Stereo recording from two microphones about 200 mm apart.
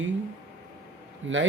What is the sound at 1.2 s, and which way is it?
Speech, 70° right (ahead or behind).